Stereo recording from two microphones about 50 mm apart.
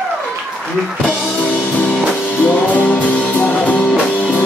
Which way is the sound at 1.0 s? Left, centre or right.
Left.